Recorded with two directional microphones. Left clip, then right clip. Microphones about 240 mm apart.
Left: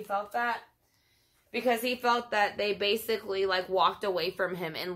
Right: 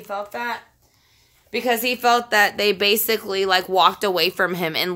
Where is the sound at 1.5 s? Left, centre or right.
Right.